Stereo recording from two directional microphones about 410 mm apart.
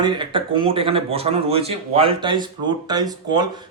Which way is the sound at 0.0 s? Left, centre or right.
Centre.